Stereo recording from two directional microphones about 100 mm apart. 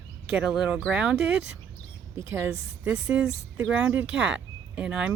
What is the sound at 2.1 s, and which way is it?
Speech, 25° right (ahead or behind).